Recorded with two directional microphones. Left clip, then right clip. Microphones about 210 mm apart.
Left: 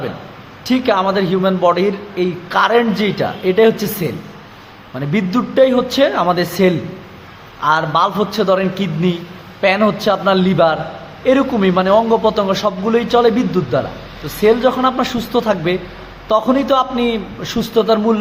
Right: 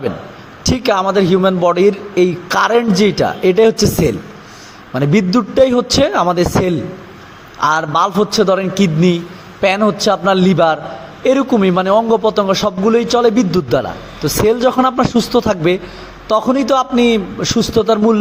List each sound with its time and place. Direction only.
0.6 s a man's voice: 35° right (ahead or behind)